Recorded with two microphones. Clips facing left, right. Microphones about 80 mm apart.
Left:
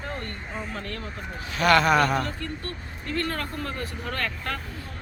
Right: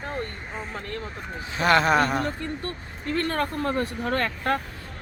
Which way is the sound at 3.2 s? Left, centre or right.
Right.